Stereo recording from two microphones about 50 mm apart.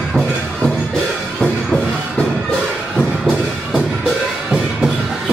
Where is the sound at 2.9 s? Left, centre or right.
Centre.